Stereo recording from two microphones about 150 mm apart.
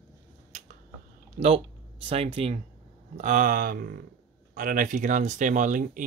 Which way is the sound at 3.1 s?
60° right (ahead or behind).